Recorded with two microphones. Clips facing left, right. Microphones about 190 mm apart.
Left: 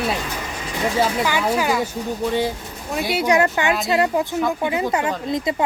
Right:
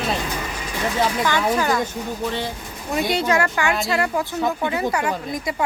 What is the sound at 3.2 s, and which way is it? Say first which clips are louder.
Speech: left 3 dB; 20° left (ahead or behind).